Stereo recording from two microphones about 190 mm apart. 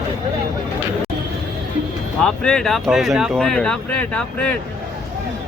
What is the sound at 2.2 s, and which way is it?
Speech, 5° left (ahead or behind).